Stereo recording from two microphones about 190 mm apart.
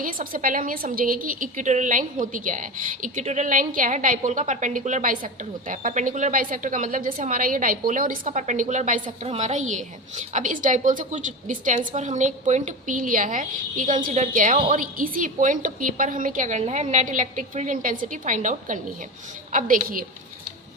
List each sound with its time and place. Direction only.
0.0 s a woman's voice: 45° right (ahead or behind)
9.0 s a woman's voice: 30° right (ahead or behind); by 20.1 s 45° right (ahead or behind)